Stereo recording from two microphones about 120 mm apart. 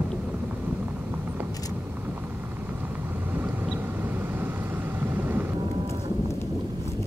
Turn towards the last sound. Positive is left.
turn(degrees=-15)  # may be behind; listen again after turning